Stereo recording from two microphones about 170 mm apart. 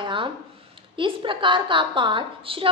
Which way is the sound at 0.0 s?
30° right (ahead or behind).